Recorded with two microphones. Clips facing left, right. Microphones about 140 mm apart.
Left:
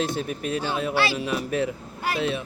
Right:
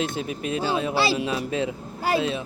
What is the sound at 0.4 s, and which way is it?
A child's voice, 25° right (ahead or behind).